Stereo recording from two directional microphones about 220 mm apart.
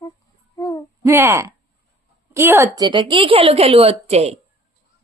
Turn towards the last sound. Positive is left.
turn(degrees=-30)  # may be behind; listen again after turning